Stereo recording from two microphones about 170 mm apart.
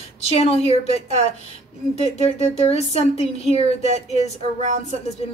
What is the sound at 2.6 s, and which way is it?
Speech, 40° left (ahead or behind).